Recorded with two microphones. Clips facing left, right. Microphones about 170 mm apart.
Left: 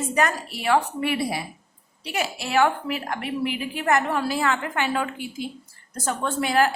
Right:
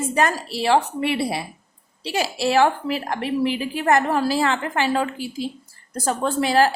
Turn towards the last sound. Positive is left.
turn(degrees=-35)  # may be behind; listen again after turning